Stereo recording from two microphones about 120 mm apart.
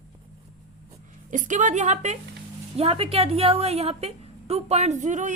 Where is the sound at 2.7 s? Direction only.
55° right (ahead or behind); by 5.3 s 90° right.